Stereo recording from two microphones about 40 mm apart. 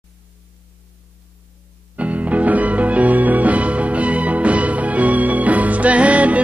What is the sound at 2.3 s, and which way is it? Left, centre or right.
Music, right.